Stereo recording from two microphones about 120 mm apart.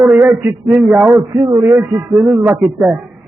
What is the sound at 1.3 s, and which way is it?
Speech, 35° right (ahead or behind).